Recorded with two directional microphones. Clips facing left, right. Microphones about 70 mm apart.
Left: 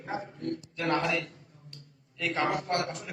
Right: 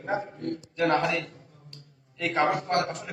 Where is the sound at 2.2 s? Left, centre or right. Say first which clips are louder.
Right 4 dB; right.